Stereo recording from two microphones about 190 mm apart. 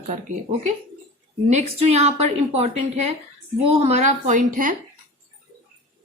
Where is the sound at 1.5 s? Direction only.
35° right (ahead or behind).